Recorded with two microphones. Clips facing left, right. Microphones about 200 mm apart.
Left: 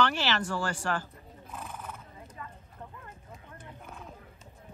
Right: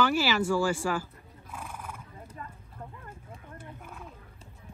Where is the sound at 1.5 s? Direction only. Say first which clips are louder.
Even; 10° right (ahead or behind).